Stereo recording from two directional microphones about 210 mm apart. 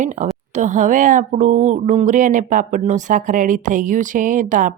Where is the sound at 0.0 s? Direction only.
35° right (ahead or behind).